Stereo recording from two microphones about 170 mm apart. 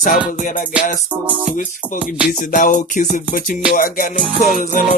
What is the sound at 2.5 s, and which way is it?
Music, 50° left (ahead or behind).